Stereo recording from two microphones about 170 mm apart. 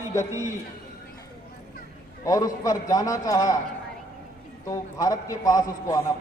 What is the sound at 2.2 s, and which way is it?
A man's voice, 20° left (ahead or behind).